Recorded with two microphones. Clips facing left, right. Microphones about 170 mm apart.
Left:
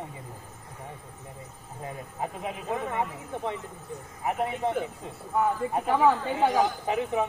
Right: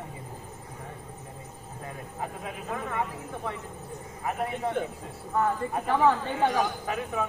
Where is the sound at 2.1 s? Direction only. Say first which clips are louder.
Left 3 dB; 20° left (ahead or behind).